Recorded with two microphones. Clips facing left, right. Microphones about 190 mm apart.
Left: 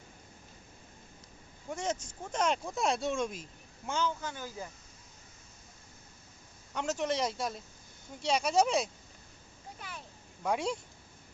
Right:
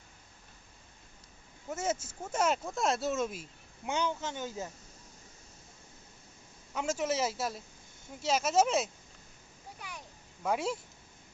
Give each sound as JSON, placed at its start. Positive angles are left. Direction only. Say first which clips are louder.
{"t": 1.7, "sound": "speech", "louder": "right 1 dB", "side_deg": -5}
{"t": 3.8, "sound": "speech", "louder": "right 1 dB", "side_deg": -20}
{"t": 6.7, "sound": "speech", "louder": "even", "side_deg": -5}
{"t": 10.4, "sound": "speech", "louder": "even", "side_deg": -5}